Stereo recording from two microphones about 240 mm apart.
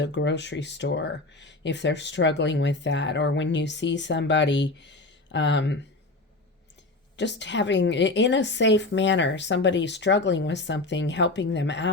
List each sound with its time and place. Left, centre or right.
0.0 s speech: left
7.2 s speech: left